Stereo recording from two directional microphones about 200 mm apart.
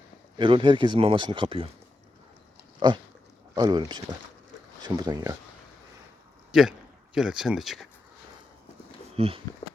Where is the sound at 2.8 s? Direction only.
20° right (ahead or behind).